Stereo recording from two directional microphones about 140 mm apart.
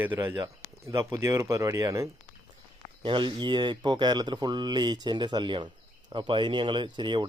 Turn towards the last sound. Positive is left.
turn(degrees=-35)  # may be behind; listen again after turning